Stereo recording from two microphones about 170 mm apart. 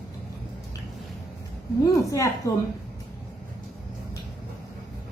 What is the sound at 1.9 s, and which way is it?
Speech, 20° left (ahead or behind).